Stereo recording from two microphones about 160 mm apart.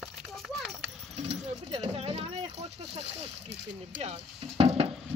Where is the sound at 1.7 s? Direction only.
40° right (ahead or behind).